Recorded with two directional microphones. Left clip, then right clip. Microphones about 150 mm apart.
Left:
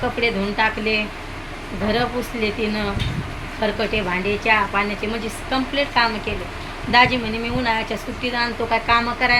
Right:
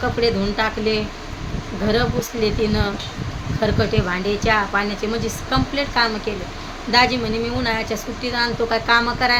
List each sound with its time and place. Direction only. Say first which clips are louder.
0.2 s a woman's voice: even; 20° right (ahead or behind)